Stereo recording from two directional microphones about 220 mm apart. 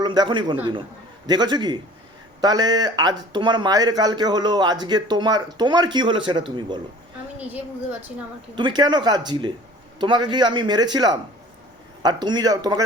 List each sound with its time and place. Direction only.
0.0 s speech: 20° right (ahead or behind)
7.3 s speech: 5° right (ahead or behind)
8.5 s speech: 20° right (ahead or behind)